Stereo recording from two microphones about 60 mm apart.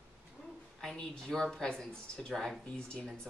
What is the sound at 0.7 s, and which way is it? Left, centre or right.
A woman's voice, centre.